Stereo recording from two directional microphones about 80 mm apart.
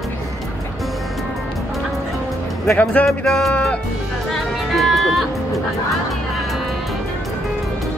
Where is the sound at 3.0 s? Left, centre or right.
Centre.